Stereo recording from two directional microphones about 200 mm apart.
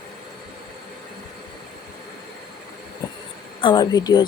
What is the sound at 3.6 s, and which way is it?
Speech, 20° left (ahead or behind).